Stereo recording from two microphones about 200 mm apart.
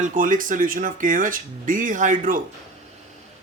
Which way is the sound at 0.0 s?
40° right (ahead or behind).